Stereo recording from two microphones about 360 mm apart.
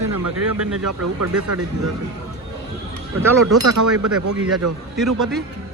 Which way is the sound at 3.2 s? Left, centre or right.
Centre.